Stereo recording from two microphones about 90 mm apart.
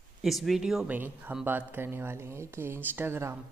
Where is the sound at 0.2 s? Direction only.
Centre (ahead or behind).